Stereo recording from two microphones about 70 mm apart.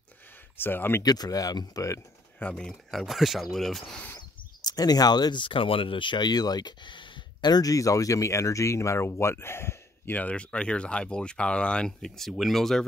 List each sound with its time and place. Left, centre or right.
0.6 s speech: left
1.0 s speech: left
2.5 s speech: centre
4.6 s speech: left
7.7 s speech: left
10.1 s speech: centre